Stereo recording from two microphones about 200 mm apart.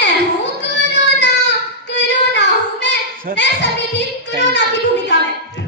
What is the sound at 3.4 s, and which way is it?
Music, 60° left (ahead or behind).